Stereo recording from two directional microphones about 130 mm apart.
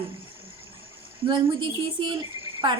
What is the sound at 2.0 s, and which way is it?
Speech, 35° right (ahead or behind).